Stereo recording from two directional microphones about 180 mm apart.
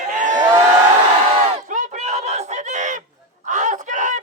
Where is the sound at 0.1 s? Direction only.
45° right (ahead or behind).